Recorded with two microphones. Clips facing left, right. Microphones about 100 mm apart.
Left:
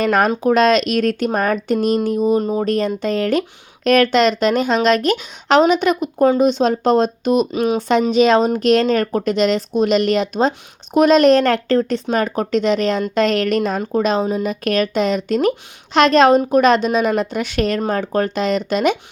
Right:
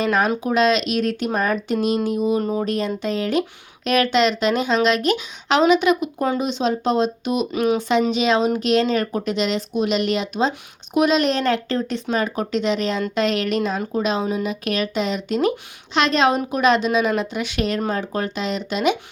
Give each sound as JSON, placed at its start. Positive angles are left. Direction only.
{"t": 0.0, "sound": "a woman's voice", "side_deg": 50}
{"t": 2.4, "sound": "speech", "side_deg": 25}
{"t": 2.6, "sound": "a woman's voice", "side_deg": 40}
{"t": 7.5, "sound": "speech", "side_deg": 25}
{"t": 7.8, "sound": "a woman's voice", "side_deg": 45}